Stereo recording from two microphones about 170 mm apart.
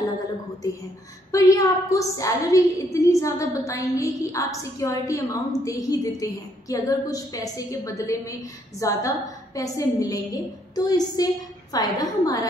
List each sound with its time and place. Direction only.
1.3 s a woman's voice: 20° left (ahead or behind)